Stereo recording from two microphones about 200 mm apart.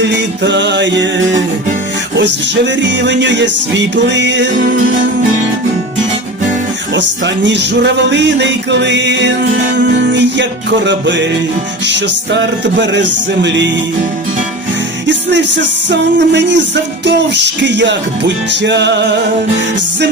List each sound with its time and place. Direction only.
0.0 s music: 60° right (ahead or behind)
6.9 s music: 60° right (ahead or behind)
15.0 s music: 65° right (ahead or behind)